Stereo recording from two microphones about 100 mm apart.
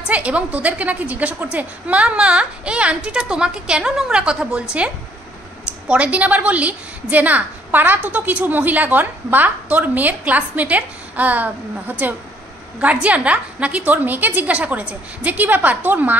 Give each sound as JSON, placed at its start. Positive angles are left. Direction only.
{"t": 0.0, "sound": "a woman's voice", "side_deg": -10}
{"t": 5.9, "sound": "a woman's voice", "side_deg": -15}